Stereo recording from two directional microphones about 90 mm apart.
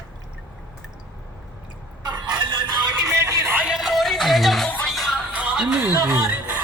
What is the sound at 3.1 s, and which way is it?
Music, 35° right (ahead or behind).